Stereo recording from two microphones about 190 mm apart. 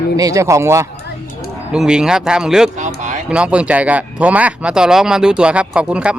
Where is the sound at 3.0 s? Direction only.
40° right (ahead or behind).